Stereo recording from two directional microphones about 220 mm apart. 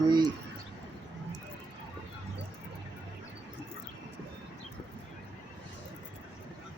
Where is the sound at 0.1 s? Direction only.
20° right (ahead or behind).